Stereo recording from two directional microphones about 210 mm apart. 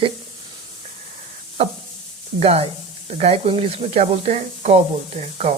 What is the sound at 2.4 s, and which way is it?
Speech, 30° right (ahead or behind).